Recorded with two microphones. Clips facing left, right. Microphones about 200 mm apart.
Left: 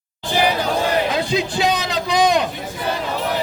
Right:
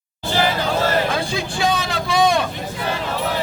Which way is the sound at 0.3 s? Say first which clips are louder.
Left 1 dB; 15° left (ahead or behind).